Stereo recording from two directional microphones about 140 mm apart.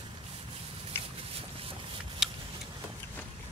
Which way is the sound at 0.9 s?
15° left (ahead or behind).